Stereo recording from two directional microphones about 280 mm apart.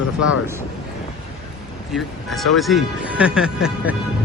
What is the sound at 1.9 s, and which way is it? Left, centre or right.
Speech, centre.